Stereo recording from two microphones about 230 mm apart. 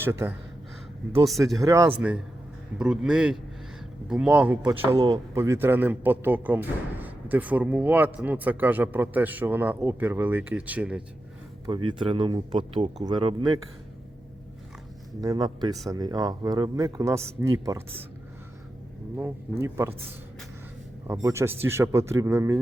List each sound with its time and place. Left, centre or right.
0.0 s speech: centre
1.5 s speech: centre
11.9 s speech: right
15.2 s speech: centre
19.1 s speech: centre
21.1 s speech: centre